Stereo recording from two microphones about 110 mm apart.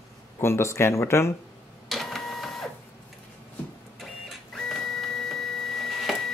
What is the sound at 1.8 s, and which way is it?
Printer, 5° left (ahead or behind).